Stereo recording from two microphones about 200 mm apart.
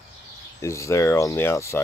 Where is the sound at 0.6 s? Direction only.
15° left (ahead or behind).